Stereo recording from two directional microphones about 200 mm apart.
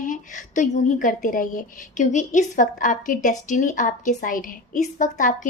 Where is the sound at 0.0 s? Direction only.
40° left (ahead or behind).